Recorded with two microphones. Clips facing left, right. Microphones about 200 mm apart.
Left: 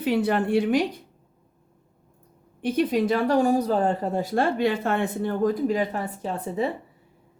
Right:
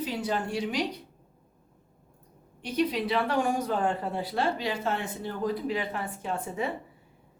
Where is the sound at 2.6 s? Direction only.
50° left (ahead or behind); by 6.7 s 35° left (ahead or behind).